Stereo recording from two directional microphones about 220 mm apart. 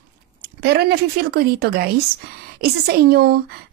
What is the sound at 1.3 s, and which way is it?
A woman's voice, 45° right (ahead or behind).